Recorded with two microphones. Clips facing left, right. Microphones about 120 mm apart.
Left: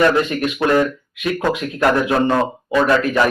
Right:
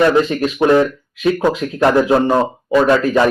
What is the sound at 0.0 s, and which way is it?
Speech, 25° right (ahead or behind).